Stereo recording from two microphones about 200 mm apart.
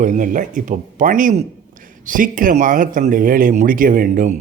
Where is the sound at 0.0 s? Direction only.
40° right (ahead or behind).